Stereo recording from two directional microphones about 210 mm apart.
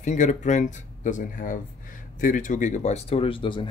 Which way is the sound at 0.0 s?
35° left (ahead or behind).